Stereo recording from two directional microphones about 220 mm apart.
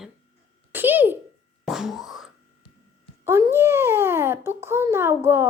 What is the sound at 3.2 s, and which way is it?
A child's voice, 10° right (ahead or behind).